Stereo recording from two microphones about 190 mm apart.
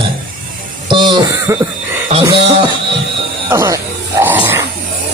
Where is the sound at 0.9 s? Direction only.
25° right (ahead or behind).